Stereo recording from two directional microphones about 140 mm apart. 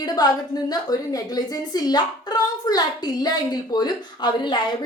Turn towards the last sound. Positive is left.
turn(degrees=35)  # may be behind; listen again after turning